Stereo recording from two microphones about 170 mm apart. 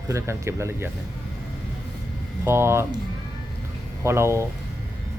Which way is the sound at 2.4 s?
15° right (ahead or behind).